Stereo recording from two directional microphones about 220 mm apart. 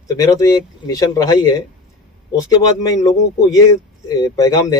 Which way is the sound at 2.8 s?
15° left (ahead or behind).